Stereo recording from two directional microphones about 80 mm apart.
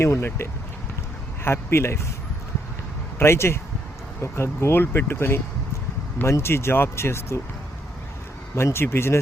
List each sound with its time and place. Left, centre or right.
0.0 s speech: left
1.5 s speech: left
3.2 s speech: left
8.5 s speech: left